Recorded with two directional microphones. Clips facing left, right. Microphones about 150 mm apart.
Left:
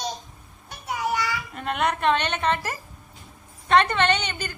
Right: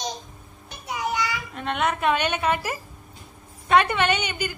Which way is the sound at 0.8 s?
20° right (ahead or behind).